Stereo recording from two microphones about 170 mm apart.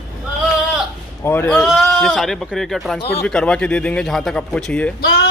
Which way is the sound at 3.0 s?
80° left.